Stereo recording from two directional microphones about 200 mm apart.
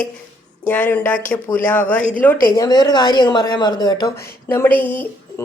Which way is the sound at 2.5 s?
20° left (ahead or behind).